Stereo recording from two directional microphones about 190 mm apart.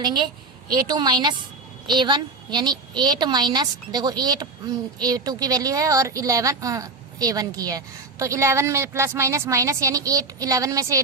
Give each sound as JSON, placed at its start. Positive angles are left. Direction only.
{"t": 0.0, "sound": "a woman's voice", "side_deg": -20}